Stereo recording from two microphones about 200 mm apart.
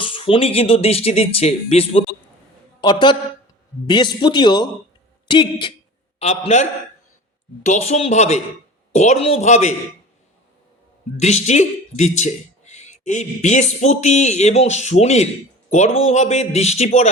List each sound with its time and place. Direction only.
0.0 s speech: 25° left (ahead or behind)
11.2 s speech: 35° left (ahead or behind)